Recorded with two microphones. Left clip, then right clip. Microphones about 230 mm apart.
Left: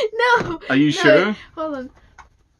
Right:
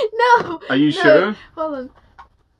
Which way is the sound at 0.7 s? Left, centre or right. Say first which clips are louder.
Even; centre.